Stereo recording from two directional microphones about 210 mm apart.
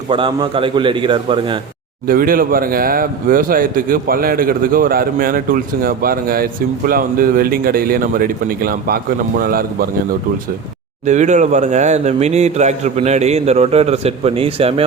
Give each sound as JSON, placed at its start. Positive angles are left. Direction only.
{"t": 0.1, "sound": "a man's voice", "side_deg": -25}
{"t": 2.0, "sound": "speech", "side_deg": -45}